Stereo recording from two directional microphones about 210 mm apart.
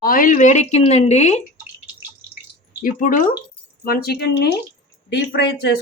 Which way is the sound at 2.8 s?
40° left (ahead or behind).